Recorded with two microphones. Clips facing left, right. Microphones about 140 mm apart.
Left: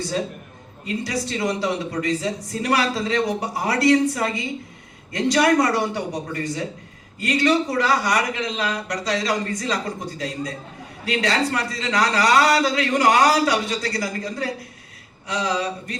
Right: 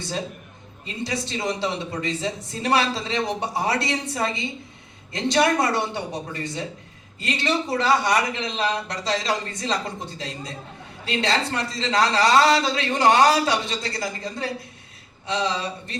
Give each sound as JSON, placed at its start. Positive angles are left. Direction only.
{"t": 0.9, "sound": "a man's voice", "side_deg": -25}